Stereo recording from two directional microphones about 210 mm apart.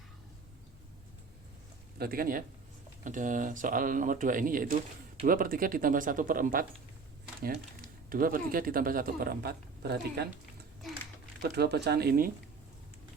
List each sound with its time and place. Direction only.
2.0 s a man's voice: 45° right (ahead or behind)
8.1 s a man's voice: 45° right (ahead or behind)
11.4 s a man's voice: 50° right (ahead or behind)